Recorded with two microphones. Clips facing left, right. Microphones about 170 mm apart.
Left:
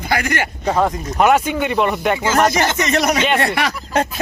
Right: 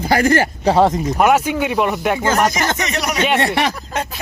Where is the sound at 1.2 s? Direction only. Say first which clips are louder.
Left 1 dB; 5° right (ahead or behind).